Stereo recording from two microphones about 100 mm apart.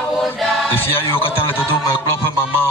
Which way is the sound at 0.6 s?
20° left (ahead or behind).